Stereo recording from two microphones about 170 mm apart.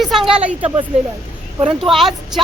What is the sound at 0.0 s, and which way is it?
Speech, centre (ahead or behind).